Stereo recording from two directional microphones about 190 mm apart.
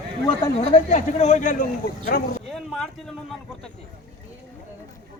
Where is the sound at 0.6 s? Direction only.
35° left (ahead or behind).